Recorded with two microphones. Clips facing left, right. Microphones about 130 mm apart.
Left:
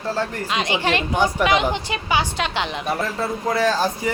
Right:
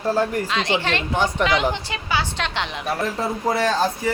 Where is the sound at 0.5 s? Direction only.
15° left (ahead or behind).